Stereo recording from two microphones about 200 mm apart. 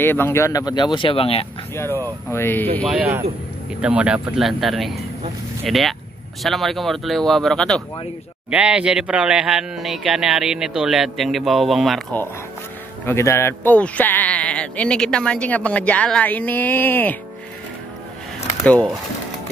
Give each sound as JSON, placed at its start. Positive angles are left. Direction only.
{"t": 0.0, "sound": "speech", "side_deg": 10}
{"t": 1.8, "sound": "speech", "side_deg": 10}
{"t": 2.9, "sound": "a man's voice", "side_deg": -10}
{"t": 13.0, "sound": "speech", "side_deg": 15}
{"t": 18.6, "sound": "speech", "side_deg": 10}